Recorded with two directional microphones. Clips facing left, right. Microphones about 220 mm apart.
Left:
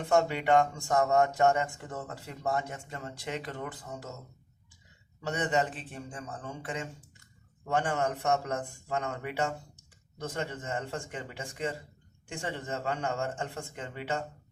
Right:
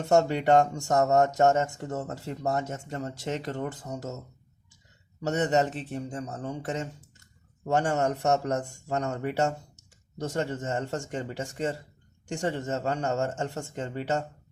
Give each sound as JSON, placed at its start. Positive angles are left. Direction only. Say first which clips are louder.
{"t": 0.0, "sound": "speech", "louder": "right 4 dB", "side_deg": -40}
{"t": 5.2, "sound": "speech", "louder": "right 5 dB", "side_deg": -40}